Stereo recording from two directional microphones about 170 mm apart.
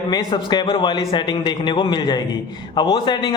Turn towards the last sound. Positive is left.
turn(degrees=25)  # may be behind; listen again after turning